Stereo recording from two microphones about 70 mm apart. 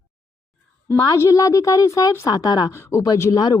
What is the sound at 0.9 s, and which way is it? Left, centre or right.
A woman's voice, left.